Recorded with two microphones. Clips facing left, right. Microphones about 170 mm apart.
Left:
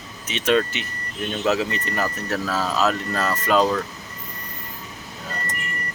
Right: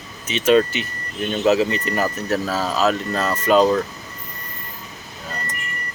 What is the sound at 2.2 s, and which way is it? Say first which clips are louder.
Speech: right 3 dB; 25° right (ahead or behind).